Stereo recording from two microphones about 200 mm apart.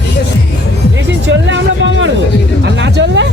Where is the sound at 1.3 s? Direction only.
65° right (ahead or behind).